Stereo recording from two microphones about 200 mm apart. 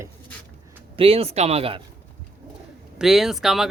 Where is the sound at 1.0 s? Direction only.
30° right (ahead or behind).